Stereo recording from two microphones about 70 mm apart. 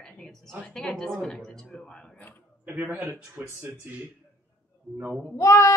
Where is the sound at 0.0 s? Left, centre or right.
Centre.